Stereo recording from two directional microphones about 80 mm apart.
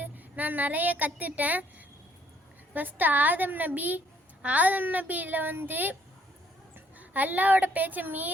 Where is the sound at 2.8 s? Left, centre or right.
Right.